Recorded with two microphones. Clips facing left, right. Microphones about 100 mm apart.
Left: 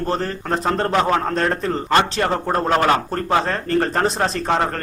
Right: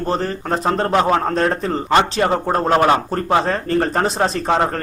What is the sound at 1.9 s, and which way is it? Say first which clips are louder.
A man's voice: right 3 dB; 15° right (ahead or behind).